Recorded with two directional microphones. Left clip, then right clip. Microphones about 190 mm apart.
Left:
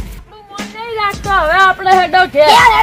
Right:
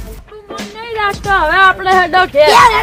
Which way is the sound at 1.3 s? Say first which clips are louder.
Right 1 dB; 45° right (ahead or behind).